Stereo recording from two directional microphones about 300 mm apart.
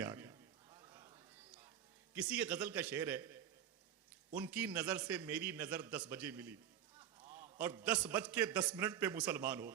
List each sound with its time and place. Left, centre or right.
0.0 s a sound: centre
2.1 s a man's voice: centre
4.4 s a man's voice: centre
7.9 s a man's voice: centre